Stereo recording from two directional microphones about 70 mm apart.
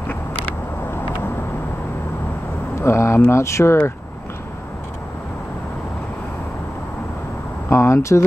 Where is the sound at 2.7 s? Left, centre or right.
Left.